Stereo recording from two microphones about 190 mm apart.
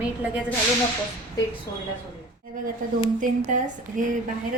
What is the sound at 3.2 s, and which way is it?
Speech, 45° right (ahead or behind).